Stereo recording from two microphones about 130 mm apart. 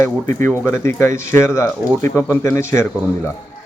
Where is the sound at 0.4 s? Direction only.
20° left (ahead or behind).